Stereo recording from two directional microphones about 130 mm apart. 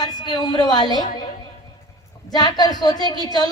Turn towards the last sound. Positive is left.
turn(degrees=30)  # may be behind; listen again after turning